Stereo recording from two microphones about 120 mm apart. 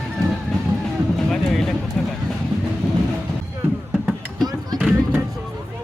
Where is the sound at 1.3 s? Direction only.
Centre (ahead or behind).